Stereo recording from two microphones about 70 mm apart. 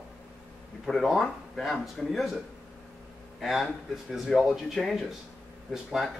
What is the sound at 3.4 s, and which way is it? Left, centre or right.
Speech, centre.